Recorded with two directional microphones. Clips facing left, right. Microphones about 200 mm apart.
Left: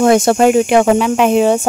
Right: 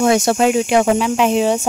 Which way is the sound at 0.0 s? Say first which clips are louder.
Left 4 dB; 50° left (ahead or behind).